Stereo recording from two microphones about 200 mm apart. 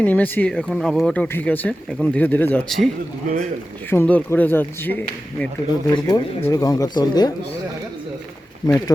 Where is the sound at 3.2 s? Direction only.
40° right (ahead or behind).